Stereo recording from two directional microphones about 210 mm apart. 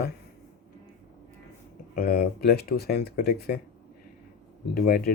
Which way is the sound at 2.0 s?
45° left (ahead or behind).